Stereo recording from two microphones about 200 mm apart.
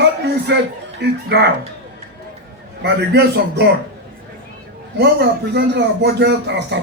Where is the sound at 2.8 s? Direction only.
55° right (ahead or behind).